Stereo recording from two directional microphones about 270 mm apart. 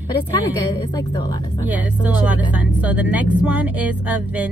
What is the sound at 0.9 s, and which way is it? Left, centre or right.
Speech, centre.